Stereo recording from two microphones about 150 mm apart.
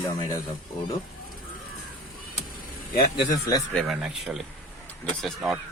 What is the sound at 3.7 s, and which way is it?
Speech, centre (ahead or behind).